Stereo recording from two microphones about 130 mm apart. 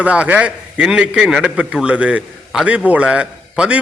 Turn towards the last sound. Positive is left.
turn(degrees=-10)  # may be behind; listen again after turning